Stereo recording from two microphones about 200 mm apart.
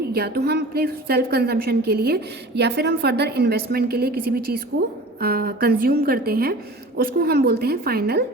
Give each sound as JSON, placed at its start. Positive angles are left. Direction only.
{"t": 0.1, "sound": "a woman's voice", "side_deg": -50}